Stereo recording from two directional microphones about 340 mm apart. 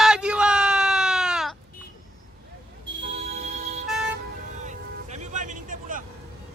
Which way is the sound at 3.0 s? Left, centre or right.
Centre.